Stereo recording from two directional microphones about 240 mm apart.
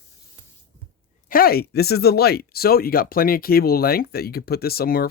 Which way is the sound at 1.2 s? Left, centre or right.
Left.